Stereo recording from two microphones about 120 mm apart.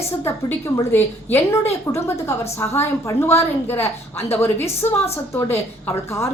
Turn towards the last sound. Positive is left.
turn(degrees=20)  # may be behind; listen again after turning